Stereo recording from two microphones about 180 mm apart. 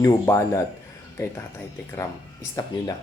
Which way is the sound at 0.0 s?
15° left (ahead or behind).